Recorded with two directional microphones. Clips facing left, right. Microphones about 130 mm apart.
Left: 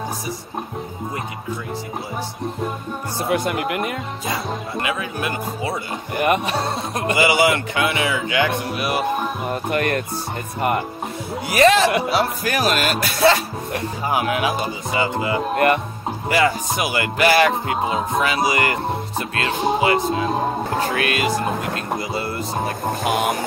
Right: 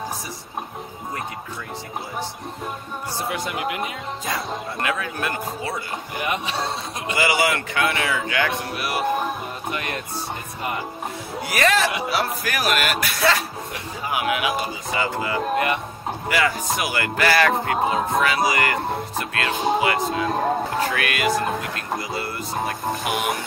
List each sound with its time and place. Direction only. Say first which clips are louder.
3.3 s speech: left 7 dB; 55° left (ahead or behind)
4.3 s speech: left 2 dB; 5° left (ahead or behind)
6.1 s speech: left 7 dB; 55° left (ahead or behind)
7.2 s speech: left 3 dB; 25° left (ahead or behind)
9.5 s speech: left 8 dB; 55° left (ahead or behind)
11.4 s speech: left 6 dB; 25° left (ahead or behind)
15.5 s speech: left 6 dB; 55° left (ahead or behind)
16.3 s speech: left 4 dB; 30° left (ahead or behind)